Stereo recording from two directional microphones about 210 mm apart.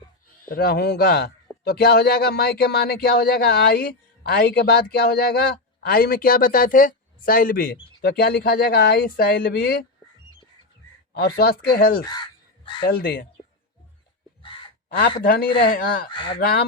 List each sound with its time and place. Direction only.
0.5 s speech: 50° left (ahead or behind)
11.1 s speech: 45° left (ahead or behind)
14.8 s a sound: 45° left (ahead or behind)
15.2 s speech: 45° left (ahead or behind)
16.0 s speech: 20° left (ahead or behind)
16.4 s speech: 45° left (ahead or behind)